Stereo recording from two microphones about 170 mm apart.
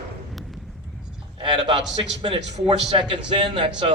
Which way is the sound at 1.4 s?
30° right (ahead or behind).